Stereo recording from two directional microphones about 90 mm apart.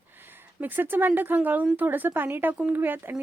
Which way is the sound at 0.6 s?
20° right (ahead or behind).